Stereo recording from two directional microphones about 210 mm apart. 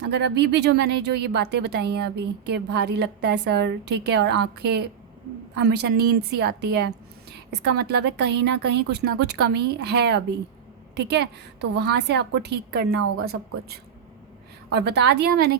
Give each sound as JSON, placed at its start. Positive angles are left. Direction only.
{"t": 0.0, "sound": "speech", "side_deg": -55}
{"t": 14.7, "sound": "speech", "side_deg": -55}